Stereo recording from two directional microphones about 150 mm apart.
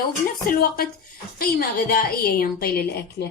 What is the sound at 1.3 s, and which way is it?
A woman's voice, 80° left.